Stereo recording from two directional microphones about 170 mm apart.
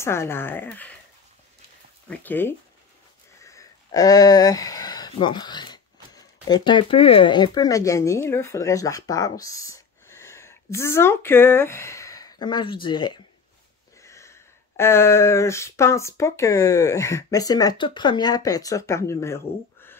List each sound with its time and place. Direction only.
0.0 s speech: 15° left (ahead or behind)
2.0 s speech: 10° left (ahead or behind)